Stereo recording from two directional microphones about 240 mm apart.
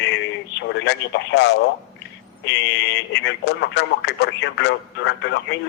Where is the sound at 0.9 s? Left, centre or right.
Left.